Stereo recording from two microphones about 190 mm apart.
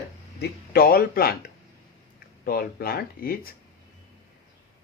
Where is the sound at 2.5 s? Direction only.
55° left (ahead or behind).